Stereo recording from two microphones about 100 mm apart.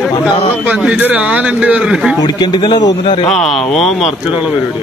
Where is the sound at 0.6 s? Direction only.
10° right (ahead or behind).